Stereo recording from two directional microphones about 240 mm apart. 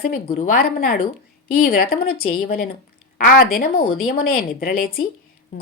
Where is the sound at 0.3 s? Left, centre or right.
Left.